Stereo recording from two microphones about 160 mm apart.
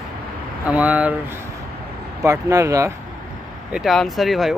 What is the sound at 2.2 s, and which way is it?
Speech, 20° right (ahead or behind).